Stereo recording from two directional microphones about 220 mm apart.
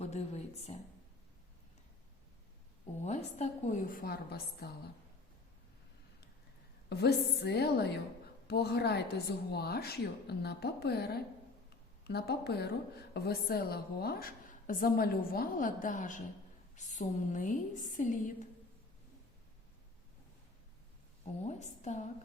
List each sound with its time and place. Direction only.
0.0 s a woman's voice: 30° left (ahead or behind)
3.0 s a woman's voice: 30° left (ahead or behind)
6.9 s a woman's voice: 50° left (ahead or behind)
21.4 s a woman's voice: 30° left (ahead or behind)